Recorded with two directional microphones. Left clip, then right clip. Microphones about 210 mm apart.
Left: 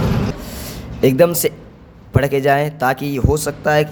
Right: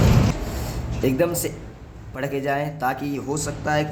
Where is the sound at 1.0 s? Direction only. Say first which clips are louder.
Left 9 dB; 50° left (ahead or behind).